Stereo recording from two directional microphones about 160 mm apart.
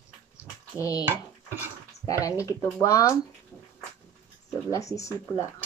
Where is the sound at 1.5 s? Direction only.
20° left (ahead or behind).